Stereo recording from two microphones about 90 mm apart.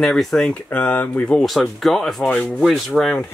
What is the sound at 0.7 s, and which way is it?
Speech, 15° left (ahead or behind).